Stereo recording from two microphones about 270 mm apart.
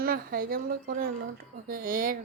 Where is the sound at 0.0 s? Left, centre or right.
Right.